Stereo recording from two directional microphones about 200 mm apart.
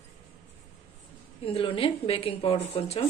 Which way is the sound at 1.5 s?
30° left (ahead or behind).